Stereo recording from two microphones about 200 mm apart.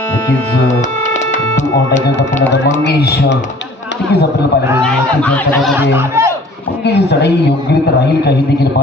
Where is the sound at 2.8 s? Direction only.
55° left (ahead or behind).